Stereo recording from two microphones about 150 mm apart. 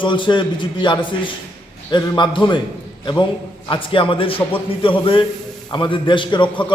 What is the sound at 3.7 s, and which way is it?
A man's voice, 35° left (ahead or behind).